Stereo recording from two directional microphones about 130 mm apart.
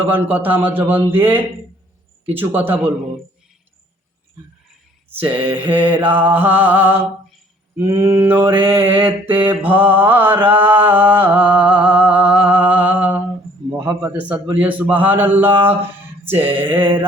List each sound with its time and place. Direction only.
0.0 s mantra: 15° right (ahead or behind)
5.1 s mantra: 15° right (ahead or behind)
13.7 s a man's voice: 20° right (ahead or behind)
14.4 s mantra: 15° right (ahead or behind)
16.7 s mantra: 40° right (ahead or behind)